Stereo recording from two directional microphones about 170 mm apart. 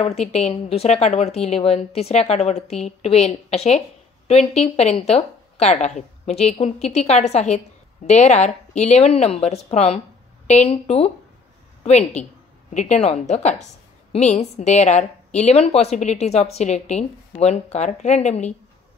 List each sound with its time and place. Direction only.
0.0 s speech: 40° left (ahead or behind)